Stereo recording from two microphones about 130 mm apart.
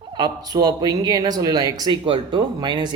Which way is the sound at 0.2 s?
30° right (ahead or behind).